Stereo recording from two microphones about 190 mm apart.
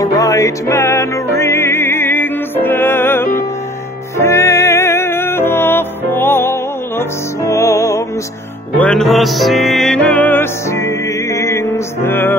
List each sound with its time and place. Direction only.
0.0 s music: 20° left (ahead or behind)
8.7 s music: 5° left (ahead or behind)